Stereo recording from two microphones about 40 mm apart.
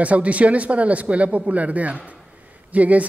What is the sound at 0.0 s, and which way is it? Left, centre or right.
A man's voice, right.